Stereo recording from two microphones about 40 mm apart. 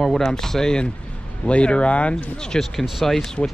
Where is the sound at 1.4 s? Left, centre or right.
Left.